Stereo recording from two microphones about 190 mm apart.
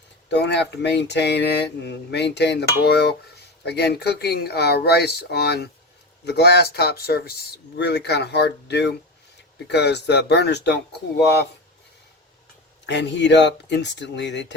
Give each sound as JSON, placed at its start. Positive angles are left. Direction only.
{"t": 0.3, "sound": "speech", "side_deg": 65}
{"t": 12.8, "sound": "speech", "side_deg": 70}